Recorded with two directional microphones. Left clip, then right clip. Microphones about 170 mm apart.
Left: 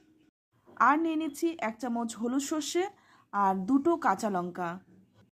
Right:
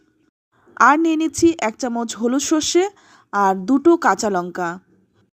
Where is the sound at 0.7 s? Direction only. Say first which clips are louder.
Right 11 dB; 40° right (ahead or behind).